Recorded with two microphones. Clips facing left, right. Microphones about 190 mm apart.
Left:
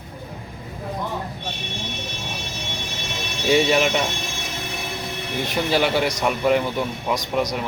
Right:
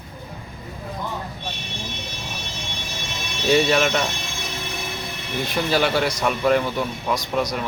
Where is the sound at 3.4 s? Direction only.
15° left (ahead or behind).